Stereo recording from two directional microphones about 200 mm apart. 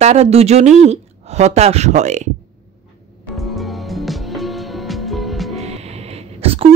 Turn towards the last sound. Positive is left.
turn(degrees=-30)  # may be behind; listen again after turning